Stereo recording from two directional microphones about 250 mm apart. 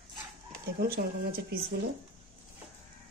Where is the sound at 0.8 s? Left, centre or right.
Right.